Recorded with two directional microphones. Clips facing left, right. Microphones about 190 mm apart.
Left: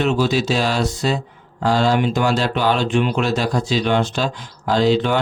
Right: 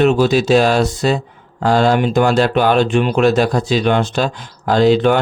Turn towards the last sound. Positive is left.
turn(degrees=-55)  # may be behind; listen again after turning